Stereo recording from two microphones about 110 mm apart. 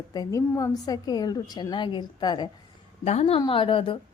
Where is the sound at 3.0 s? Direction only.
75° left (ahead or behind).